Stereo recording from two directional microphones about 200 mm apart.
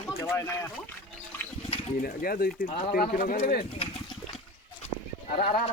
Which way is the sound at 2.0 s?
45° left (ahead or behind).